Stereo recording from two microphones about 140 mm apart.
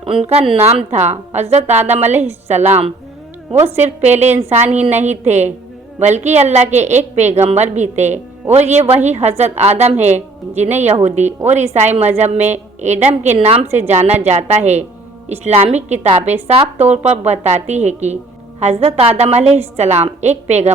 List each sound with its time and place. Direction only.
0.5 s a woman's voice: 50° right (ahead or behind)